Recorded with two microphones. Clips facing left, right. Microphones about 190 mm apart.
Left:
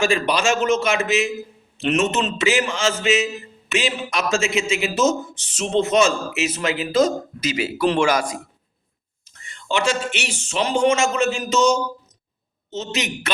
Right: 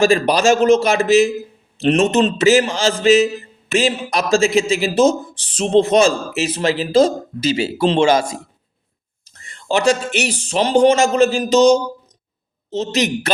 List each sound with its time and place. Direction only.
0.0 s a man's voice: 40° right (ahead or behind)
9.2 s a man's voice: 35° right (ahead or behind)